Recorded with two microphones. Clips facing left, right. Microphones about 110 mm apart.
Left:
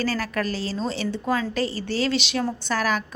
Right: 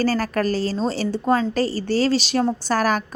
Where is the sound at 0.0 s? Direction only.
40° right (ahead or behind).